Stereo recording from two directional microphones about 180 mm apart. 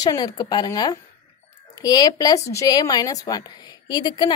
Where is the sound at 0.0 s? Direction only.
20° left (ahead or behind).